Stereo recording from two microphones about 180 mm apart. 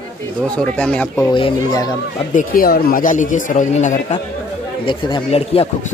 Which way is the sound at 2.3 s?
50° left (ahead or behind).